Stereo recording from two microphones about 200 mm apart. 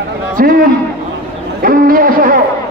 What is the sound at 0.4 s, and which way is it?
Speech, 45° right (ahead or behind).